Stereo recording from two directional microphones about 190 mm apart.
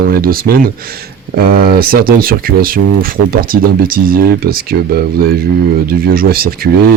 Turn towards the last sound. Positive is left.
turn(degrees=-50)  # may be behind; listen again after turning